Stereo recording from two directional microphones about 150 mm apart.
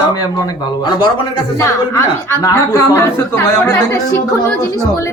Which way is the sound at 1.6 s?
20° left (ahead or behind).